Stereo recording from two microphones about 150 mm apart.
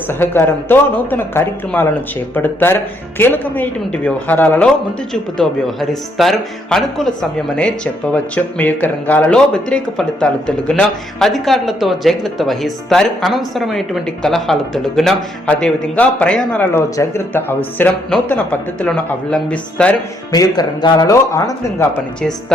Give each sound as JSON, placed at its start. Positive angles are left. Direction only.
{"t": 0.1, "sound": "speech", "side_deg": 15}
{"t": 20.3, "sound": "speech", "side_deg": 25}